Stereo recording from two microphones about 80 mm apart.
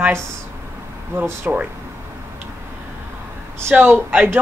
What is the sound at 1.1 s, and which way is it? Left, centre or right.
Speech, right.